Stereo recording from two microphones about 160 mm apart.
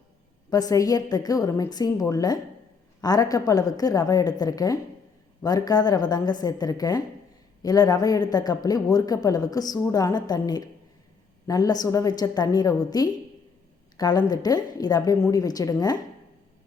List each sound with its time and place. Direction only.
0.5 s a man's voice: 20° left (ahead or behind)